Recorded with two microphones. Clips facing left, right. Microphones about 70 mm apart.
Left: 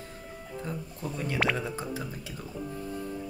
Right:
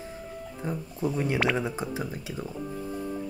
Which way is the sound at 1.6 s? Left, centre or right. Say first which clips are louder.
Right 3 dB; centre.